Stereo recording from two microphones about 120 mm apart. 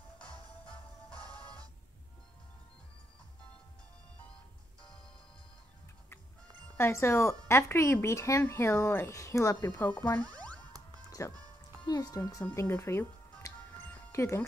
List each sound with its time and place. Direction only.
0.2 s music: 10° left (ahead or behind)
6.8 s speech: 25° left (ahead or behind)
9.8 s speech: 15° left (ahead or behind)
10.1 s music: 10° left (ahead or behind)
11.1 s music: 25° left (ahead or behind)
11.8 s speech: 35° left (ahead or behind)
12.5 s speech: 20° left (ahead or behind)
13.6 s music: 10° left (ahead or behind)
14.1 s speech: 25° left (ahead or behind)